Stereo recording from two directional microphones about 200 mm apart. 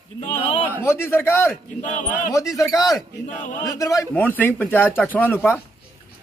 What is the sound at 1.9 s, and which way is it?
Speech, 40° left (ahead or behind).